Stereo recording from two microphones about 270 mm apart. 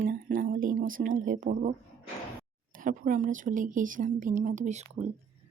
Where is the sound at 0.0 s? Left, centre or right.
Right.